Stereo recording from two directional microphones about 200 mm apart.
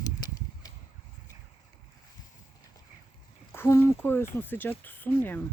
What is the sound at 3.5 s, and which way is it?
Speech, 10° left (ahead or behind).